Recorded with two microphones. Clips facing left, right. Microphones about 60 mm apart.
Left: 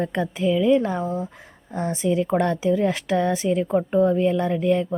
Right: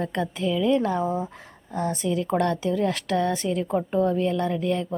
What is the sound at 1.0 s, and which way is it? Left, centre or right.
Speech, centre.